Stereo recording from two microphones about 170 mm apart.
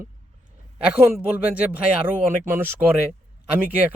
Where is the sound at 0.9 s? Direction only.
10° right (ahead or behind).